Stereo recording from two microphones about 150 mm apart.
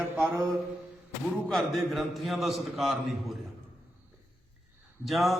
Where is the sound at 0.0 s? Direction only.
15° right (ahead or behind).